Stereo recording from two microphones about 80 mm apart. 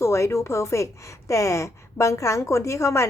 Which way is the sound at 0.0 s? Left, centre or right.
Left.